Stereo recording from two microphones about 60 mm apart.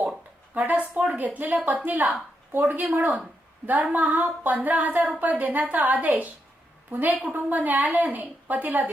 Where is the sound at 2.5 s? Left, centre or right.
Right.